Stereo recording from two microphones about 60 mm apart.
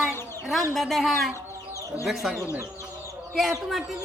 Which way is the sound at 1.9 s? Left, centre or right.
Right.